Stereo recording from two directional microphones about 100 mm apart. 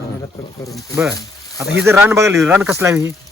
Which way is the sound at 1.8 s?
25° right (ahead or behind).